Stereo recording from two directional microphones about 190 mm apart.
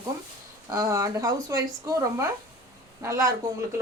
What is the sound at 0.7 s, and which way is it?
Speech, 15° right (ahead or behind).